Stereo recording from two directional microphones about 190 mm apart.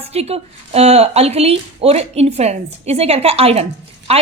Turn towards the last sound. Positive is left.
turn(degrees=-35)  # may be behind; listen again after turning